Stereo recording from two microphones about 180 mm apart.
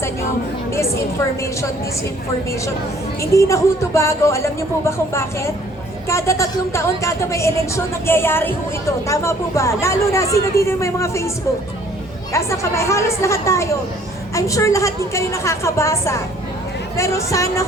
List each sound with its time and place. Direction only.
3.2 s speech: 15° left (ahead or behind)
12.3 s speech: 15° left (ahead or behind)